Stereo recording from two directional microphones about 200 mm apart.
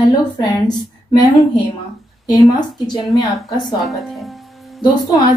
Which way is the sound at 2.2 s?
20° left (ahead or behind).